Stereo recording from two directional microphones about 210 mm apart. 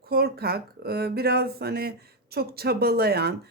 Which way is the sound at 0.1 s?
50° right (ahead or behind).